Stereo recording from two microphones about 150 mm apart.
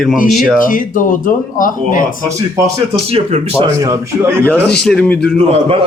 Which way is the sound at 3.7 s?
20° right (ahead or behind).